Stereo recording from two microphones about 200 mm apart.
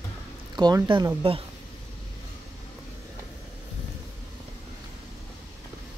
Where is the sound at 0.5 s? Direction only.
20° right (ahead or behind).